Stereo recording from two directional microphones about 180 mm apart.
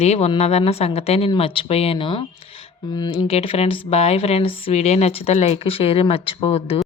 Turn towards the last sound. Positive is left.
turn(degrees=35)  # may be behind; listen again after turning